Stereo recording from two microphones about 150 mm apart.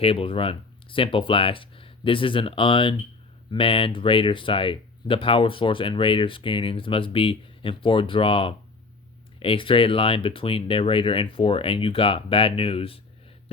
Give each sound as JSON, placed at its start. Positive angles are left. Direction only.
{"t": 0.0, "sound": "speech", "side_deg": 40}